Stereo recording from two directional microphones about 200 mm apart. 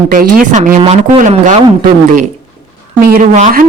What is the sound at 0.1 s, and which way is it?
Speech, 45° right (ahead or behind).